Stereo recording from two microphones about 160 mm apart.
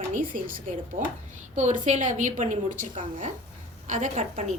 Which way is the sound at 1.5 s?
50° right (ahead or behind).